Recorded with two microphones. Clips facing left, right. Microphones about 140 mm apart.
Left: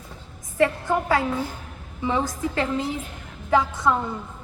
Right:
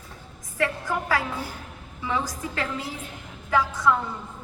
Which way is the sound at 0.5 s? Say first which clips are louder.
Left 5 dB; 25° left (ahead or behind).